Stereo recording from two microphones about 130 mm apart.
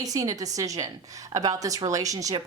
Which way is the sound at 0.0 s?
25° right (ahead or behind).